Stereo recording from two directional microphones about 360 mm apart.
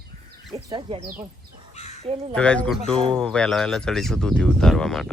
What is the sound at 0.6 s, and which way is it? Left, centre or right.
Speech, centre.